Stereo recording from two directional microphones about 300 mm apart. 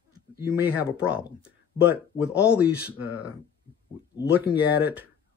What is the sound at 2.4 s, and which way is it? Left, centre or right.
Speech, centre.